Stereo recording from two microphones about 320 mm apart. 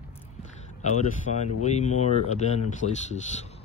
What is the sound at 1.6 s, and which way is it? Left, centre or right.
Speech, left.